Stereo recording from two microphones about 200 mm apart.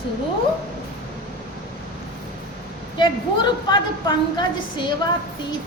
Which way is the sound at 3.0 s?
20° left (ahead or behind).